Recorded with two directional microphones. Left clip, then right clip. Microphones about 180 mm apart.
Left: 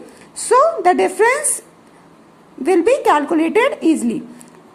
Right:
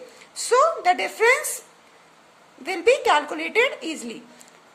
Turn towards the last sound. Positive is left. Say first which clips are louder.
# left 10 dB
turn(degrees=10)  # may be behind; listen again after turning